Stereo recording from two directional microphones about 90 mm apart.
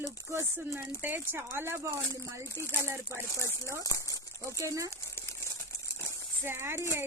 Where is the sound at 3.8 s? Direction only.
40° left (ahead or behind).